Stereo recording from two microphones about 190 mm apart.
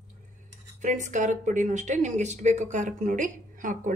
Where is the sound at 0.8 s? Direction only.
40° right (ahead or behind).